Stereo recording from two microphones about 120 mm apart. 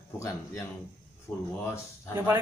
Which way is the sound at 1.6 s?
20° left (ahead or behind).